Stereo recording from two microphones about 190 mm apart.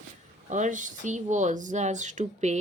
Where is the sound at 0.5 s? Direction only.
40° right (ahead or behind).